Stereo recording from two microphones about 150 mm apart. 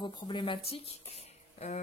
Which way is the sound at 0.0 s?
30° left (ahead or behind).